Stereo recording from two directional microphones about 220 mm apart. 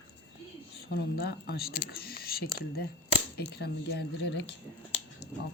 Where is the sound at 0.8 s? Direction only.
45° left (ahead or behind).